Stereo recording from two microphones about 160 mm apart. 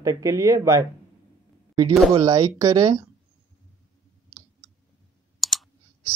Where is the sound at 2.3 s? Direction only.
20° right (ahead or behind).